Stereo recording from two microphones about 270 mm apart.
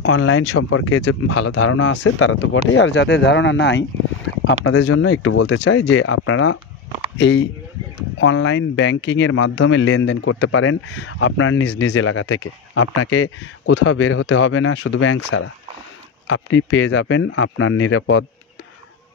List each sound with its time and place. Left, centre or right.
0.0 s speech: left
4.8 s speech: left